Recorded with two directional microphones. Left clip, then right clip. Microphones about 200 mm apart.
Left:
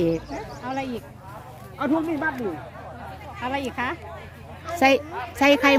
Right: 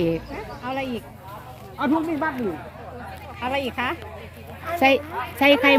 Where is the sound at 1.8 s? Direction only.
50° right (ahead or behind).